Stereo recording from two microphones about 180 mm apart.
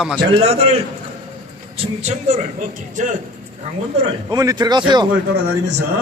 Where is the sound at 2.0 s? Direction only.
40° right (ahead or behind).